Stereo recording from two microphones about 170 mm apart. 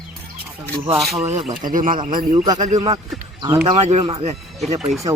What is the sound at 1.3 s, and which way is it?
Speech, 40° right (ahead or behind).